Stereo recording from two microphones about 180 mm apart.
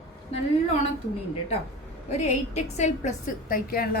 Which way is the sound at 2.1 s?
40° left (ahead or behind).